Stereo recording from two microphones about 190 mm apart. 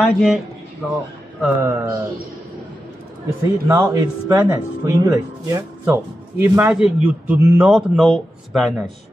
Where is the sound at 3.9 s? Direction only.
15° right (ahead or behind).